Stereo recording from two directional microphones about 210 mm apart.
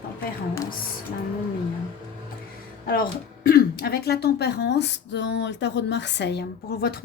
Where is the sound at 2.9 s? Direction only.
45° left (ahead or behind).